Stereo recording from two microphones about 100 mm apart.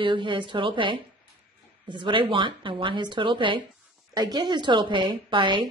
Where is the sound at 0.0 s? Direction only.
55° right (ahead or behind).